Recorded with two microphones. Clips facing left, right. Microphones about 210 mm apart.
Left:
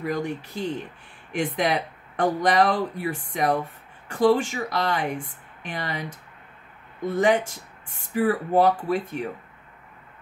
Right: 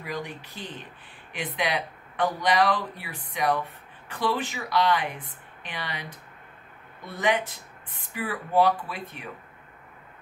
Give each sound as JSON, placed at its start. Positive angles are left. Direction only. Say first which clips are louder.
{"t": 0.0, "sound": "speech", "louder": "left 7 dB", "side_deg": 45}